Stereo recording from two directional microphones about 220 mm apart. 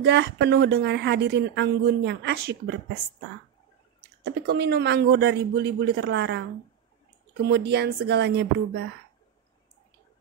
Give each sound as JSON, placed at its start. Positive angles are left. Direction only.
{"t": 0.0, "sound": "speech", "side_deg": -50}
{"t": 4.2, "sound": "speech", "side_deg": -50}
{"t": 7.4, "sound": "speech", "side_deg": -50}